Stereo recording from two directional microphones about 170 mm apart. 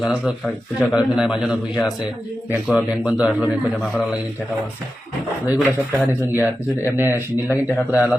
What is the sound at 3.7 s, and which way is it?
Speech, 5° left (ahead or behind).